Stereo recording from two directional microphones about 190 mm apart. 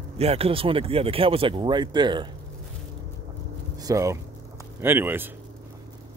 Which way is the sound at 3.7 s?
20° right (ahead or behind).